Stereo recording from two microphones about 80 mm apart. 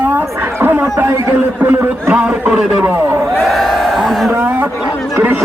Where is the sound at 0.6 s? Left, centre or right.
Right.